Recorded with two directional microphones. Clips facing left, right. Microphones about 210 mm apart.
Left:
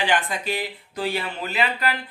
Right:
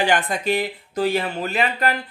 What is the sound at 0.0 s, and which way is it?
Speech, 45° right (ahead or behind).